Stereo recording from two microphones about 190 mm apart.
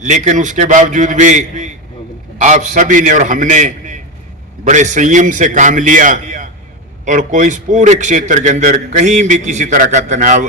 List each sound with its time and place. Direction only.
0.0 s a man's voice: 40° right (ahead or behind)